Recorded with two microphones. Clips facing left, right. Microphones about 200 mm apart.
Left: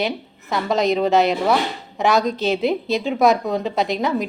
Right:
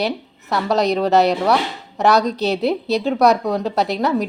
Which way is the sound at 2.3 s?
40° right (ahead or behind).